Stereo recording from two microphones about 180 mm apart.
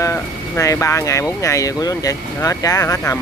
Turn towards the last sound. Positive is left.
turn(degrees=15)  # may be behind; listen again after turning